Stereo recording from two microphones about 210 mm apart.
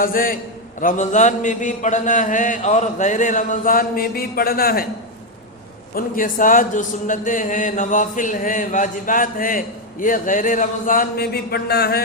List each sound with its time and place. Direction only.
0.0 s a man's voice: 40° left (ahead or behind)
5.9 s a man's voice: 40° left (ahead or behind)